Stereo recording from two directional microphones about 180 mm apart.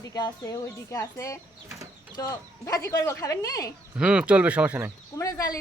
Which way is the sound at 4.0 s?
5° right (ahead or behind).